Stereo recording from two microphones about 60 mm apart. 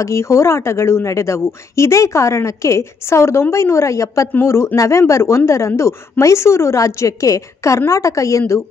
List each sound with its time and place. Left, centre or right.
0.0 s a woman's voice: left